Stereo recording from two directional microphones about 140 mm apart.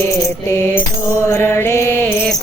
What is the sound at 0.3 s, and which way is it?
Mantra, 15° left (ahead or behind).